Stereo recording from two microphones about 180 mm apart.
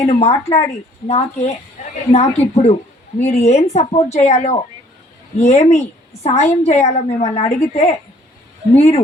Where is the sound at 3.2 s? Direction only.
40° left (ahead or behind).